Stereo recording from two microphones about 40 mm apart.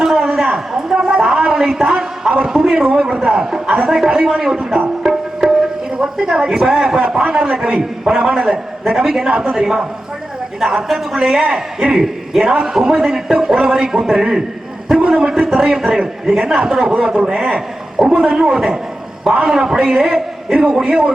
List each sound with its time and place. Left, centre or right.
0.0 s a sound: centre
2.3 s a man's voice: centre
5.0 s music: centre
6.0 s a man's voice: centre